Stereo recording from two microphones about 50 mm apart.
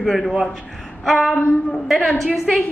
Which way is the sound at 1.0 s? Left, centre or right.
Centre.